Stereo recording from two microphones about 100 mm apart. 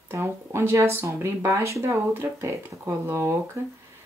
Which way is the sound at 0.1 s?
25° right (ahead or behind).